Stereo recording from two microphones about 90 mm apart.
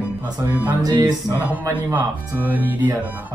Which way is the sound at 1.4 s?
20° right (ahead or behind).